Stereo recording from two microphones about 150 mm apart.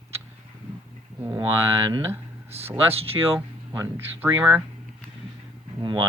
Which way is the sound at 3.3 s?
15° right (ahead or behind).